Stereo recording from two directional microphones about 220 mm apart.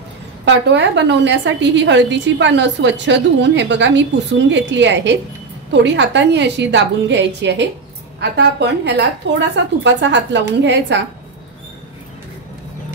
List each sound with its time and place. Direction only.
0.5 s a woman's voice: 55° right (ahead or behind)